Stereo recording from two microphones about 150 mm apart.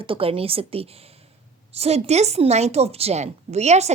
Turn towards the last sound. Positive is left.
turn(degrees=-45)  # may be behind; listen again after turning